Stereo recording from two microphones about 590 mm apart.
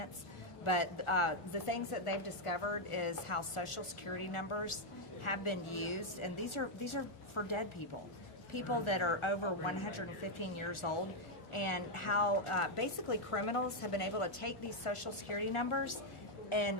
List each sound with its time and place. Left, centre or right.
0.6 s a woman's voice: left